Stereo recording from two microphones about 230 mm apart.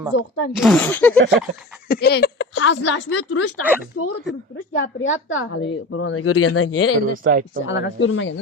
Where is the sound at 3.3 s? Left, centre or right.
Left.